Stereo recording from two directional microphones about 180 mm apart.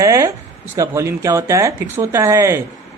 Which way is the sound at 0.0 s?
20° right (ahead or behind).